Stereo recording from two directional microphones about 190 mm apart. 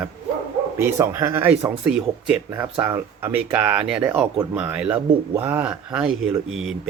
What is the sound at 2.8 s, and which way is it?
Speech, 10° right (ahead or behind).